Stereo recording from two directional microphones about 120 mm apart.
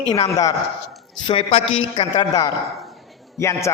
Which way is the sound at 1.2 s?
50° left (ahead or behind).